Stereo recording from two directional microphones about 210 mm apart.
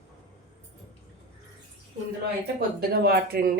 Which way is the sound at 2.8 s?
45° right (ahead or behind).